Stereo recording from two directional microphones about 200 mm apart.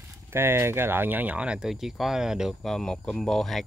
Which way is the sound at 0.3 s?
10° right (ahead or behind).